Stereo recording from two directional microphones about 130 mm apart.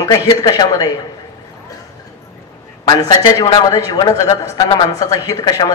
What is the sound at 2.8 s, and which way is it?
A man's voice, 30° left (ahead or behind).